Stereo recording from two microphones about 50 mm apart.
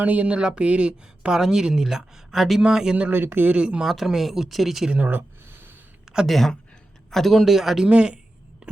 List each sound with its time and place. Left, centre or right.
0.0 s speech: right; by 2.9 s centre
3.3 s speech: right
3.8 s speech: centre
4.9 s a sound: right
6.2 s speech: centre
7.9 s speech: right